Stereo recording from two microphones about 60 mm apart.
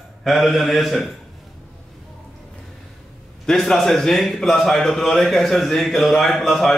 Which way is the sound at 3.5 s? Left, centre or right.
Centre.